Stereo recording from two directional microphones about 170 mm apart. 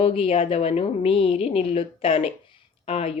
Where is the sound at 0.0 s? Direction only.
35° left (ahead or behind).